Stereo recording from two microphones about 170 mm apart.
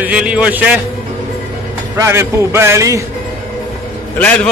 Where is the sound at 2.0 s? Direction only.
15° right (ahead or behind).